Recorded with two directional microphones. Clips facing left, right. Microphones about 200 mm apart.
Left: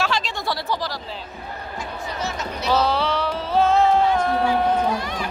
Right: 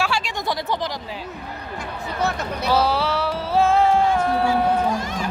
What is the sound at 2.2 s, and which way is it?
Speech, 55° right (ahead or behind).